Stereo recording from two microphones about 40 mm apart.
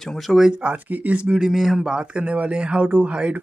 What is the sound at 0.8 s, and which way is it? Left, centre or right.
Speech, right.